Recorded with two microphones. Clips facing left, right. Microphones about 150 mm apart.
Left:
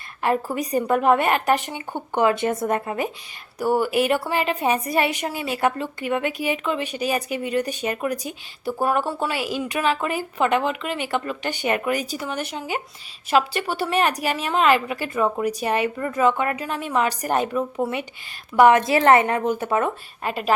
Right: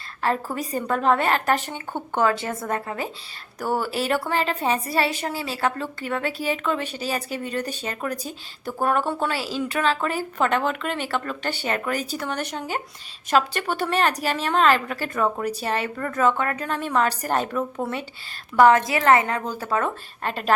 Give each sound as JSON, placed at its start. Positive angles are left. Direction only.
{"t": 0.2, "sound": "speech", "side_deg": 15}
{"t": 18.5, "sound": "speech", "side_deg": 20}
{"t": 20.2, "sound": "speech", "side_deg": 10}